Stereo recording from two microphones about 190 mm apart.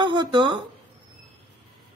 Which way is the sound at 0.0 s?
25° right (ahead or behind).